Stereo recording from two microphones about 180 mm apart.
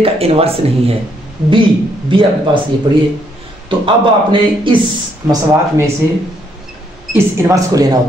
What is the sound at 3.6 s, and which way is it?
A man's voice, 25° right (ahead or behind).